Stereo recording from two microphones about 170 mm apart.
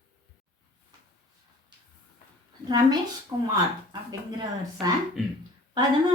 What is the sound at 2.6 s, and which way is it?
Speech, 25° right (ahead or behind).